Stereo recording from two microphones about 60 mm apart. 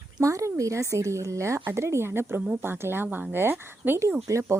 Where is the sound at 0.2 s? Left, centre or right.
Right.